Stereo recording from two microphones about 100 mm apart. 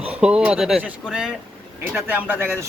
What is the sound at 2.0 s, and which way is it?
Speech, 20° right (ahead or behind).